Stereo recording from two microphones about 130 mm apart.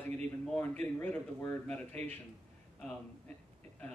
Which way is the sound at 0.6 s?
10° left (ahead or behind).